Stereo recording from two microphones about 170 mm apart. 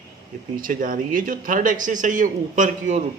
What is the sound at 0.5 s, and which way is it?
Speech, 55° right (ahead or behind).